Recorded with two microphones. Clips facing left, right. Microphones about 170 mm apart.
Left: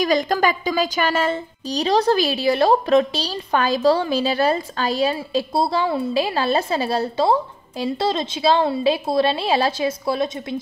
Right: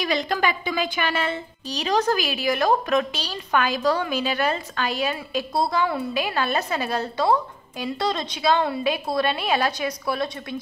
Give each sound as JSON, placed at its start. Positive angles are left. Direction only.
{"t": 0.0, "sound": "a woman's voice", "side_deg": 45}